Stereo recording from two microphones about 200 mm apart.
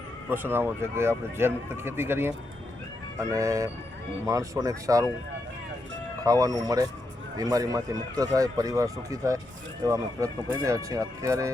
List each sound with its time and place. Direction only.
0.3 s speech: 10° right (ahead or behind)
6.2 s speech: 20° right (ahead or behind)